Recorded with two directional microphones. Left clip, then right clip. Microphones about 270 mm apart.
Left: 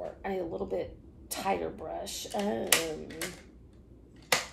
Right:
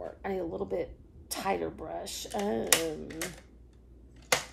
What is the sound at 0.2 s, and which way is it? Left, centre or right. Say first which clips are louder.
A woman's voice: right 1 dB; centre.